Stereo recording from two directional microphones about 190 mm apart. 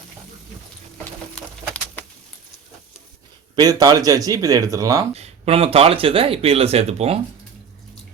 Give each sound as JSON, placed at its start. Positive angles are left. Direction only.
{"t": 1.4, "sound": "a sound", "side_deg": 5}
{"t": 3.5, "sound": "speech", "side_deg": -20}
{"t": 5.1, "sound": "speech", "side_deg": -35}